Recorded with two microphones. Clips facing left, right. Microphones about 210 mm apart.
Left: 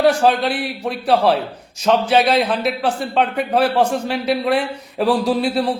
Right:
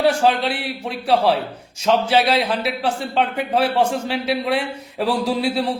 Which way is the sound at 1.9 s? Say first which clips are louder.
Left 2 dB; 55° left (ahead or behind).